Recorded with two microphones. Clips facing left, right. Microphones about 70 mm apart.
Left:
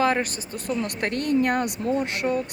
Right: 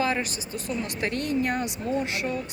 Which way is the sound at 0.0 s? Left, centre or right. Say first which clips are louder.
Left 4 dB; left.